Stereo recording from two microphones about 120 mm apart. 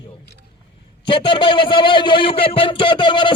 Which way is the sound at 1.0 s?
45° left (ahead or behind).